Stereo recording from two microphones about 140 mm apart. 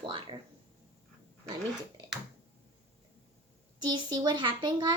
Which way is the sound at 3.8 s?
30° right (ahead or behind).